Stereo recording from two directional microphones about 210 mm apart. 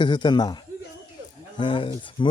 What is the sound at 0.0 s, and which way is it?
Speech, 20° left (ahead or behind).